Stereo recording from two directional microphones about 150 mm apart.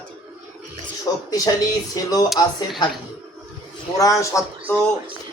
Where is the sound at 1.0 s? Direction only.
25° left (ahead or behind).